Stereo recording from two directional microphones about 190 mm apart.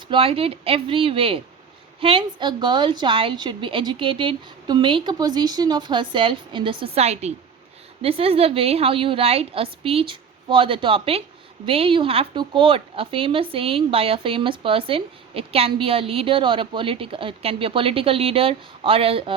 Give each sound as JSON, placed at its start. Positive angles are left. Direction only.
{"t": 0.1, "sound": "speech", "side_deg": -30}